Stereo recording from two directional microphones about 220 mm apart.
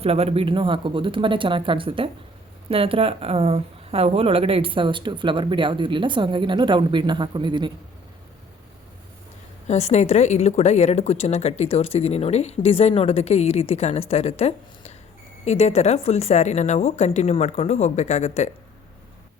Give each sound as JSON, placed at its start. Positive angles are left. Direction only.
{"t": 0.0, "sound": "speech", "side_deg": -25}
{"t": 9.6, "sound": "a woman's voice", "side_deg": 30}